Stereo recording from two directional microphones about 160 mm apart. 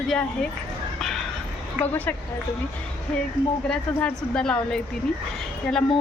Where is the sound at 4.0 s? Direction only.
5° left (ahead or behind).